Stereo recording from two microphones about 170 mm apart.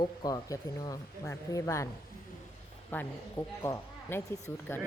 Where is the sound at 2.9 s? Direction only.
15° left (ahead or behind).